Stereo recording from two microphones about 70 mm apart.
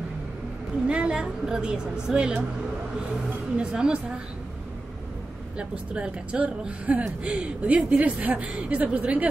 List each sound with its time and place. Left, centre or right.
0.8 s a woman's voice: centre
3.5 s a woman's voice: centre
5.6 s a woman's voice: centre